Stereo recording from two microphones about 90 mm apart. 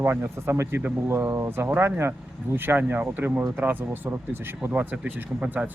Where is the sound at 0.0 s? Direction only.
30° right (ahead or behind).